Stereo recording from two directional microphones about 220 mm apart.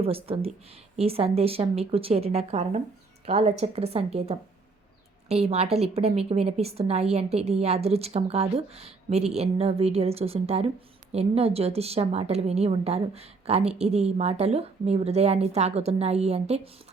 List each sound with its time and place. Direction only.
0.0 s a woman's voice: 25° right (ahead or behind)